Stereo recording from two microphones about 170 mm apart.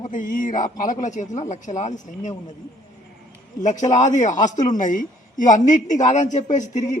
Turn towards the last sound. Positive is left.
turn(degrees=45)  # may be behind; listen again after turning